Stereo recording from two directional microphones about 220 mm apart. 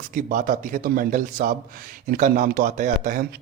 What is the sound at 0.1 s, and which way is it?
Speech, 40° right (ahead or behind).